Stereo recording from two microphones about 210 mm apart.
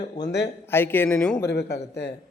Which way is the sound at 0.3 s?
55° left (ahead or behind).